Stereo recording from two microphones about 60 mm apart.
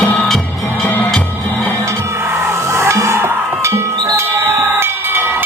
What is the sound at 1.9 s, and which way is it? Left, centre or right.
Music, right.